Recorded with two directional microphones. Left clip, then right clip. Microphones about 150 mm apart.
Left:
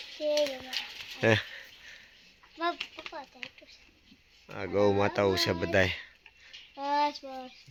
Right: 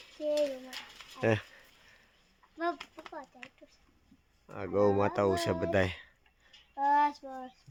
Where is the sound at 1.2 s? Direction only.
Centre (ahead or behind).